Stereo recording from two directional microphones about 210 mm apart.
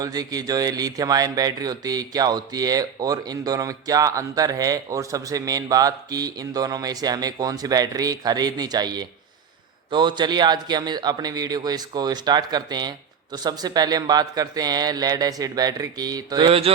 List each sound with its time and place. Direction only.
0.0 s a man's voice: 20° right (ahead or behind)